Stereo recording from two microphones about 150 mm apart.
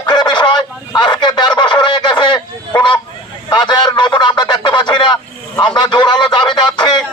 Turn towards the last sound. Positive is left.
turn(degrees=30)  # may be behind; listen again after turning